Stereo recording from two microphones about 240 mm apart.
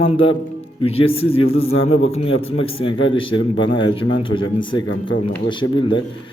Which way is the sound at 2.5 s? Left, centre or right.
Left.